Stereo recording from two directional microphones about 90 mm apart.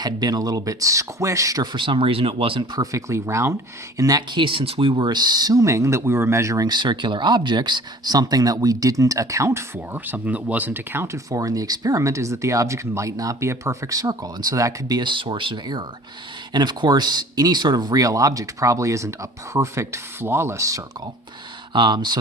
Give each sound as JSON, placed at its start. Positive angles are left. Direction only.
{"t": 0.0, "sound": "speech", "side_deg": -45}
{"t": 1.7, "sound": "speech", "side_deg": -70}
{"t": 2.7, "sound": "speech", "side_deg": -40}
{"t": 4.3, "sound": "speech", "side_deg": -70}
{"t": 6.7, "sound": "speech", "side_deg": -55}
{"t": 9.7, "sound": "speech", "side_deg": -20}
{"t": 21.7, "sound": "speech", "side_deg": -55}